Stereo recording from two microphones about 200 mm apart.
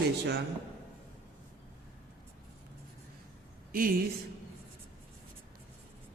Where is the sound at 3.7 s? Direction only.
45° right (ahead or behind).